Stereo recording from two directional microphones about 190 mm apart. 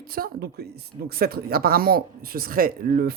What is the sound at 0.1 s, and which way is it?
Speech, 55° right (ahead or behind).